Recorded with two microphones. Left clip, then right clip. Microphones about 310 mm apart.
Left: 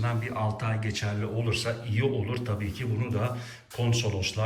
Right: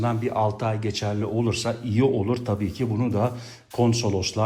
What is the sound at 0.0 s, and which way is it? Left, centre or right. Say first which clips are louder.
A man's voice: right 8 dB; centre.